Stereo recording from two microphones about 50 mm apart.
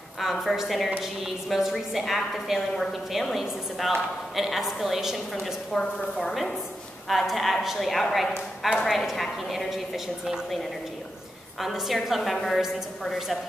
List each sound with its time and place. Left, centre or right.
0.2 s a woman's voice: centre
11.6 s a woman's voice: centre